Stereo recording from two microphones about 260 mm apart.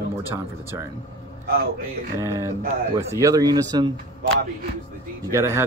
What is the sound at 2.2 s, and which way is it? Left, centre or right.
Speech, centre.